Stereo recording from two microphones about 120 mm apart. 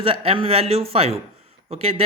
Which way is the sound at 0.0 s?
50° right (ahead or behind).